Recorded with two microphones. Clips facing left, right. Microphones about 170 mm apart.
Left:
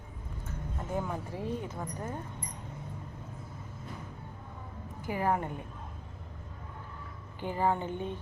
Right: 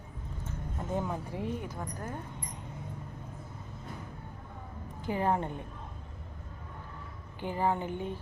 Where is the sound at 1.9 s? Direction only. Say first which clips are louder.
Left 1 dB; 15° left (ahead or behind).